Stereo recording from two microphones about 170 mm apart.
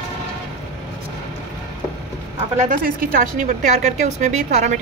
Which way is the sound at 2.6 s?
55° right (ahead or behind).